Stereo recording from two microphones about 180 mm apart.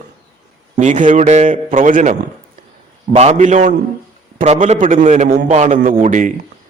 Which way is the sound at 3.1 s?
40° right (ahead or behind).